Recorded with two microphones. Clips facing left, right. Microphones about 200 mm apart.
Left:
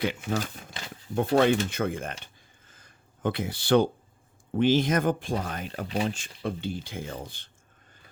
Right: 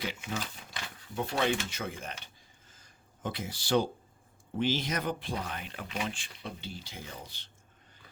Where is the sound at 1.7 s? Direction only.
55° left (ahead or behind).